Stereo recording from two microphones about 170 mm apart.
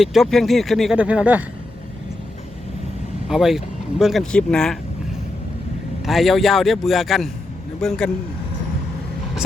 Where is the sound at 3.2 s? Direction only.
Centre (ahead or behind).